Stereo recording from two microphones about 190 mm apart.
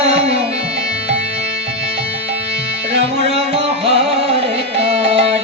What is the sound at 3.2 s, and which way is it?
Music, 30° right (ahead or behind).